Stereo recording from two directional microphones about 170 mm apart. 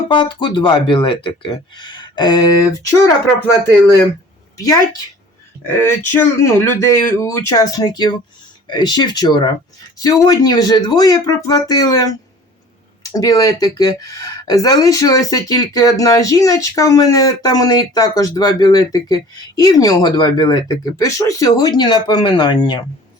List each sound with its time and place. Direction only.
0.1 s speech: 30° left (ahead or behind)
4.5 s speech: 20° left (ahead or behind)